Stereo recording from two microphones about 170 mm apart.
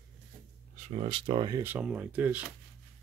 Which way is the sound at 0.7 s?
40° right (ahead or behind).